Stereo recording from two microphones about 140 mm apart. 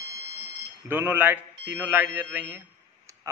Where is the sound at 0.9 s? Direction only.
15° right (ahead or behind).